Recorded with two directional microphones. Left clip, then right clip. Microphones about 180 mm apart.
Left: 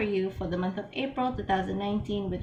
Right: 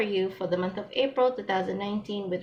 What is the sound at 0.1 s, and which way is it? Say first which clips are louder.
A woman's voice: right 3 dB; 40° right (ahead or behind).